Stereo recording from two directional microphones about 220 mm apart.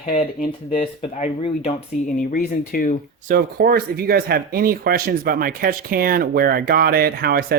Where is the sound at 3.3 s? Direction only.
45° right (ahead or behind).